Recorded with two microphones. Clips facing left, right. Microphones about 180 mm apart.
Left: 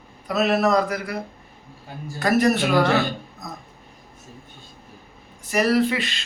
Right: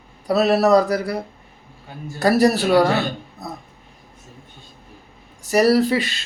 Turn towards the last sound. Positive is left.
turn(degrees=-40)  # may be behind; listen again after turning